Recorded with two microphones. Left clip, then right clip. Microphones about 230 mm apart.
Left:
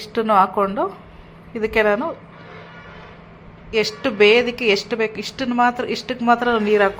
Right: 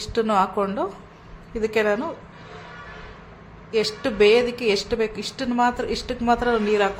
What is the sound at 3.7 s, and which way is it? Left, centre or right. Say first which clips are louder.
A woman's voice: left 3 dB; centre.